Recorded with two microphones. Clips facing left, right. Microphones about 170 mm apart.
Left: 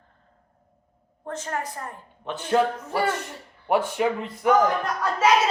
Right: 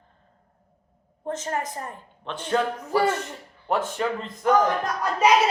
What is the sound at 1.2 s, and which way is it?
Speech, 25° right (ahead or behind).